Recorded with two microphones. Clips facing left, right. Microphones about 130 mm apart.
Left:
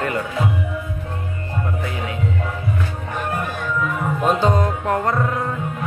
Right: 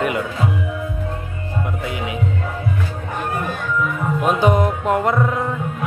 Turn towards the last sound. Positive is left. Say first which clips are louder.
# right 2 dB
turn(degrees=-20)  # may be behind; listen again after turning